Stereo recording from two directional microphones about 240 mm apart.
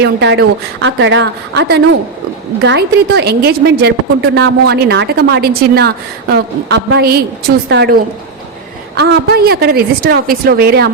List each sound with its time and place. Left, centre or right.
0.0 s a woman's voice: right
9.0 s a woman's voice: right